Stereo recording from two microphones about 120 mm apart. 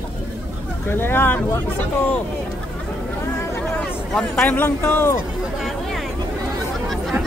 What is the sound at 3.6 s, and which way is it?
Speech, 10° left (ahead or behind).